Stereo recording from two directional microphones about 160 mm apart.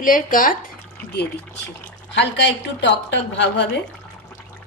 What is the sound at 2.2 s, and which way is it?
A woman's voice, 90° left.